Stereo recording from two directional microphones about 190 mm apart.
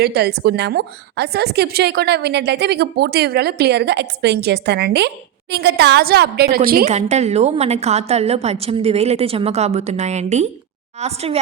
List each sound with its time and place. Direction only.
0.0 s a woman's voice: 60° right (ahead or behind)
6.8 s a woman's voice: 35° right (ahead or behind)